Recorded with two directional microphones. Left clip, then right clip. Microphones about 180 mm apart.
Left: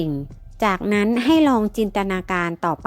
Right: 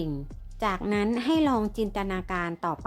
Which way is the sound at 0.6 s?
35° left (ahead or behind).